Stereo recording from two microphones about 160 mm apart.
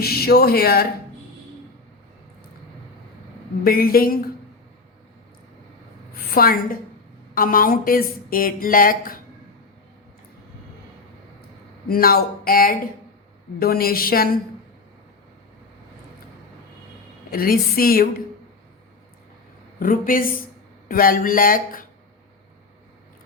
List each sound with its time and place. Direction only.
0.0 s speech: 75° left (ahead or behind)
3.6 s speech: 70° left (ahead or behind)
6.3 s speech: 65° left (ahead or behind)
11.9 s speech: 70° left (ahead or behind)
17.3 s speech: 65° left (ahead or behind)
19.8 s speech: 60° left (ahead or behind)